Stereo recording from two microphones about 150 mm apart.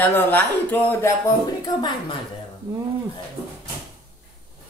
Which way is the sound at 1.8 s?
30° left (ahead or behind).